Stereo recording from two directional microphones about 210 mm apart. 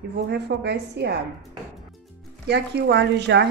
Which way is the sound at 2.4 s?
55° right (ahead or behind).